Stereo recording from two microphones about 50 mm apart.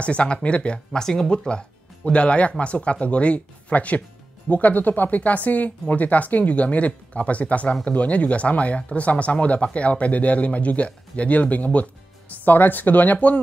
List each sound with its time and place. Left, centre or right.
0.0 s speech: left
0.9 s speech: centre; by 13.4 s left